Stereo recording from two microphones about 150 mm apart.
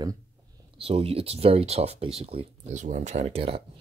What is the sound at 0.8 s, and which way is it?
Speech, 40° right (ahead or behind).